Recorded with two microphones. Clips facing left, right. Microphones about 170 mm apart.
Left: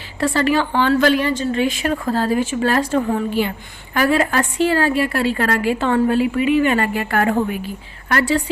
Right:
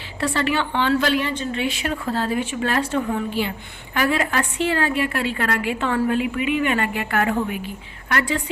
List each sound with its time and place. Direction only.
0.2 s a woman's voice: 40° left (ahead or behind)